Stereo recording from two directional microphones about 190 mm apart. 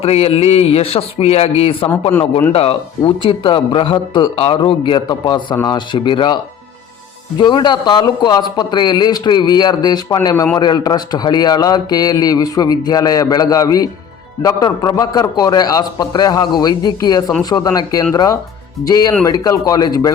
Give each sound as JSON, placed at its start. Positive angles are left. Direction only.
{"t": 0.0, "sound": "a man's voice", "side_deg": 30}